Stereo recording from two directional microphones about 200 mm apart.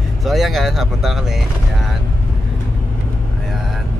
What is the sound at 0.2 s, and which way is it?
Speech, centre (ahead or behind).